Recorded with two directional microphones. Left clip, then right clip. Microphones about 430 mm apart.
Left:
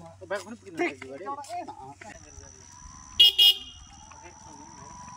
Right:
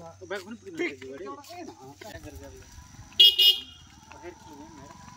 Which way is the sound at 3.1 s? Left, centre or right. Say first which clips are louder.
Even; centre.